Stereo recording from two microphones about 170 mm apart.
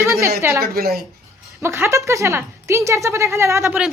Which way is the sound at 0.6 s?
60° right (ahead or behind).